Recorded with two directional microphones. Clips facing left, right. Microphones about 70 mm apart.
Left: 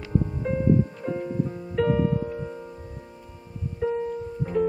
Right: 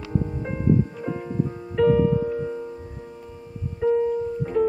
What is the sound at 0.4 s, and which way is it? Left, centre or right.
Music, centre.